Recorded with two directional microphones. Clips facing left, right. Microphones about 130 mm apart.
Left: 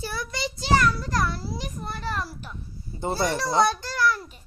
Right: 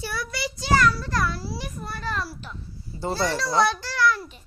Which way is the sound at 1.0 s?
40° left (ahead or behind).